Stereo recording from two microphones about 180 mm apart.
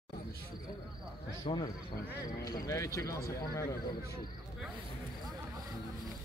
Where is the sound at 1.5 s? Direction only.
30° left (ahead or behind).